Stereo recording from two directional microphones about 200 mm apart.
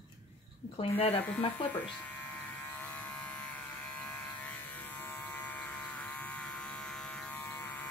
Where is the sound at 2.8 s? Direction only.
10° left (ahead or behind).